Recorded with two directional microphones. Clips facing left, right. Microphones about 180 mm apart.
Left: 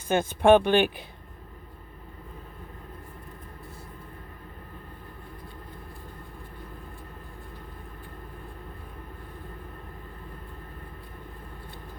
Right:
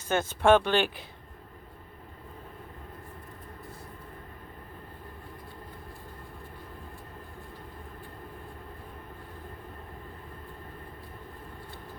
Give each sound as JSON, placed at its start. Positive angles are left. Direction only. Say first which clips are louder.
{"t": 0.1, "sound": "speech", "louder": "left 3 dB", "side_deg": 15}